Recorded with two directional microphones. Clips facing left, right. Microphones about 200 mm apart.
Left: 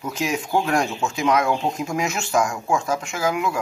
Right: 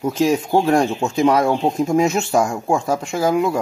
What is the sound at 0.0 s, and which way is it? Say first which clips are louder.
Speech: right 8 dB; 30° right (ahead or behind).